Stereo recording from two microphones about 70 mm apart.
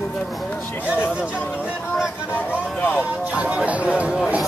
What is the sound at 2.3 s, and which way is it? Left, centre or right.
Speech, left.